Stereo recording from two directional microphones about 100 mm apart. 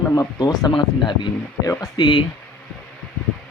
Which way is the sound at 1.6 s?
35° left (ahead or behind).